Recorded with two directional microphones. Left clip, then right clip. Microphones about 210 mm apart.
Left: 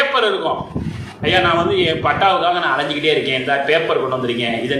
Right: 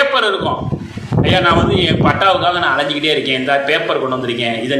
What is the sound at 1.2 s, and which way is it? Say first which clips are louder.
A man's voice: right 2 dB; 35° right (ahead or behind).